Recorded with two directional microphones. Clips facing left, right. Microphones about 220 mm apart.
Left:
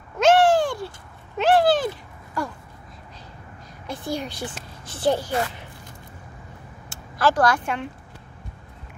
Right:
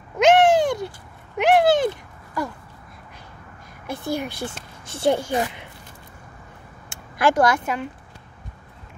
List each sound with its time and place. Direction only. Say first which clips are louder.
0.2 s a sound: right 1 dB; 20° right (ahead or behind)
3.8 s a woman's voice: right 2 dB; 10° right (ahead or behind)
7.2 s speech: right 2 dB; 10° right (ahead or behind)